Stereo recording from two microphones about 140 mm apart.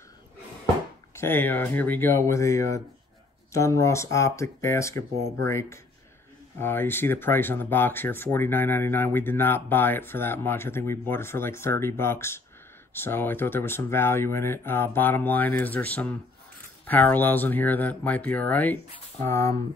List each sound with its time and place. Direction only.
1.1 s speech: 15° left (ahead or behind)